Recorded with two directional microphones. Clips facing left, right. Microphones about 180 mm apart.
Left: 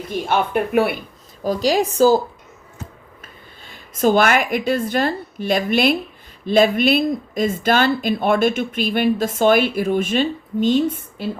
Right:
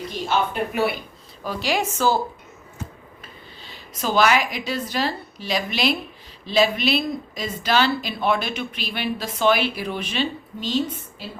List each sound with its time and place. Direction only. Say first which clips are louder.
0.3 s speech: left 3 dB; 55° left (ahead or behind)
1.5 s speech: left 7 dB; 40° left (ahead or behind)
3.6 s speech: left 12 dB; 50° left (ahead or behind)